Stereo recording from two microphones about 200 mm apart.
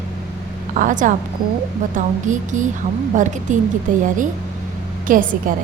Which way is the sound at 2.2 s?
40° right (ahead or behind).